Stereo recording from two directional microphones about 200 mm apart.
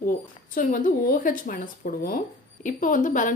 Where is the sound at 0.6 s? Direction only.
45° left (ahead or behind).